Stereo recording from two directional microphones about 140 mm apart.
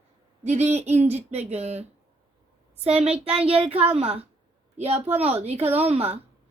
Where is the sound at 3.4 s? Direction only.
45° right (ahead or behind).